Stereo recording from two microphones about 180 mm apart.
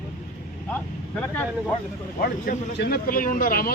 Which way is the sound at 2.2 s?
60° left (ahead or behind).